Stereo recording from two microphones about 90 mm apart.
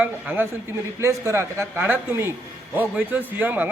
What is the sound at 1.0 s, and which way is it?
A man's voice, 30° right (ahead or behind).